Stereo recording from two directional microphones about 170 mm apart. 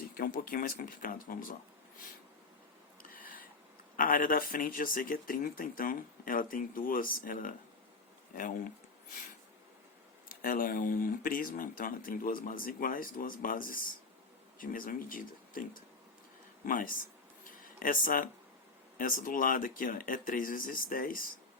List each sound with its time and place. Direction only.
0.1 s speech: 55° left (ahead or behind)
3.0 s a sound: 55° left (ahead or behind)
3.9 s speech: 55° left (ahead or behind)
10.2 s speech: 55° left (ahead or behind)
17.4 s a sound: 55° left (ahead or behind)
18.9 s speech: 55° left (ahead or behind)